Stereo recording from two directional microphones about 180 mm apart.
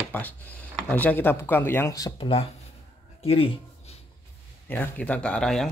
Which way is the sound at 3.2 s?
35° left (ahead or behind).